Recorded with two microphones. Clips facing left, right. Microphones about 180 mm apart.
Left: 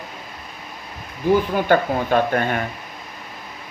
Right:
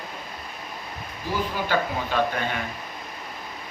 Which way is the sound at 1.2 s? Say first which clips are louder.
Left 10 dB; 55° left (ahead or behind).